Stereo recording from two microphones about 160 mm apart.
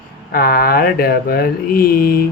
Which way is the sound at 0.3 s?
70° left (ahead or behind).